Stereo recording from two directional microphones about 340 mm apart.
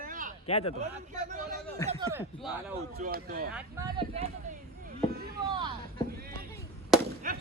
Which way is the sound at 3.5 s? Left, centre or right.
Centre.